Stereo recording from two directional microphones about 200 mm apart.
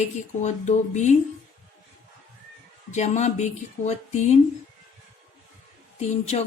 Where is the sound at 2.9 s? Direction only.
35° left (ahead or behind).